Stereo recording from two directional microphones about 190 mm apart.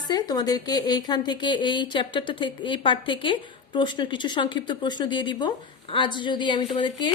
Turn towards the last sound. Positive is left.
turn(degrees=25)  # may be behind; listen again after turning